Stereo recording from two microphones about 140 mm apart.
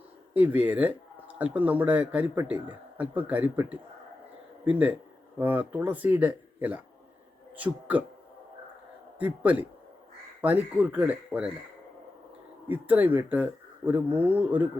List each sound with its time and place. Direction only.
0.3 s speech: 10° right (ahead or behind)
9.1 s speech: 10° right (ahead or behind)
12.6 s speech: 10° right (ahead or behind)